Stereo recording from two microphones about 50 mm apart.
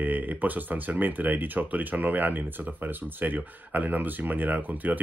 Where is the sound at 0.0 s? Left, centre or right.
Right.